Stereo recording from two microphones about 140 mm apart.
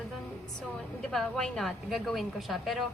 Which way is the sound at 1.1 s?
5° left (ahead or behind).